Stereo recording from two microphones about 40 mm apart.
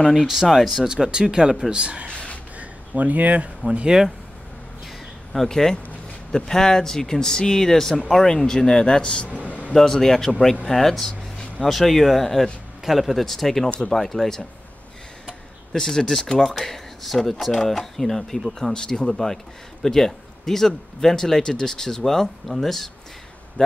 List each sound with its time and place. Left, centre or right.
0.3 s speech: centre
1.1 s speech: centre
1.7 s speech: right
2.0 s a sound: left
3.0 s speech: right
3.6 s speech: right
5.5 s a man's voice: centre
9.5 s a sound: left
9.8 s a man's voice: centre
15.7 s a man's voice: centre
18.7 s a man's voice: centre